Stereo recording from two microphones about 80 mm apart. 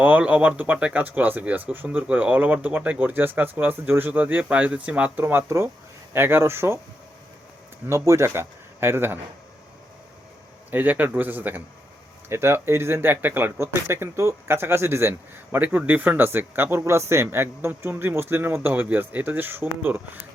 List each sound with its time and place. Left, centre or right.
0.0 s speech: centre
5.2 s speech: right
7.9 s speech: right
10.7 s speech: right